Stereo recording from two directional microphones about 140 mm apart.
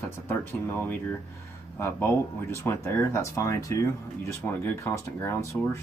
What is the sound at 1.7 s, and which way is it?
Speech, 20° left (ahead or behind).